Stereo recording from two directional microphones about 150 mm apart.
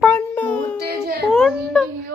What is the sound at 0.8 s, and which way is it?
Speech, 90° right.